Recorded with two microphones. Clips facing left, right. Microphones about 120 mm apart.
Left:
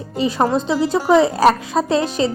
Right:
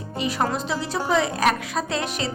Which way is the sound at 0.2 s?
30° left (ahead or behind).